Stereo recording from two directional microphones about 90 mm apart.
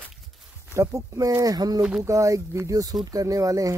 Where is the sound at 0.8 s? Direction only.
35° right (ahead or behind).